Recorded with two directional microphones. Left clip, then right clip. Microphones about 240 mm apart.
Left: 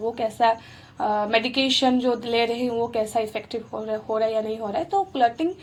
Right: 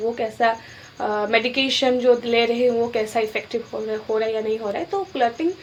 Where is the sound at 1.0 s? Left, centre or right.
Left.